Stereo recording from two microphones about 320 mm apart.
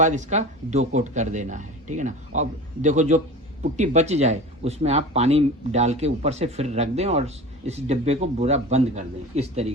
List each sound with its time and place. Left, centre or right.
0.0 s speech: right